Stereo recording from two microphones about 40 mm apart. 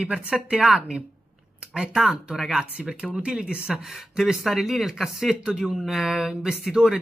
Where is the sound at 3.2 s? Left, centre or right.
Right.